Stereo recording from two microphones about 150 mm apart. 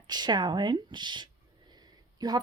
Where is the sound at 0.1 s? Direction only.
30° right (ahead or behind).